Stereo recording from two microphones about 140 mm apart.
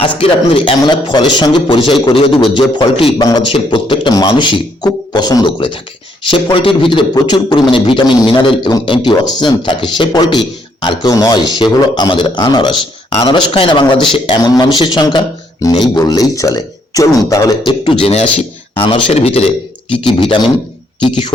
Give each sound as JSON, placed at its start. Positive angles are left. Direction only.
{"t": 0.0, "sound": "a man's voice", "side_deg": 40}
{"t": 3.2, "sound": "speech", "side_deg": 25}
{"t": 3.4, "sound": "a man's voice", "side_deg": 40}
{"t": 17.7, "sound": "a man's voice", "side_deg": 40}